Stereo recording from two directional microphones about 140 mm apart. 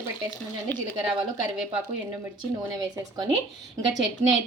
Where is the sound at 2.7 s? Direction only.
30° right (ahead or behind).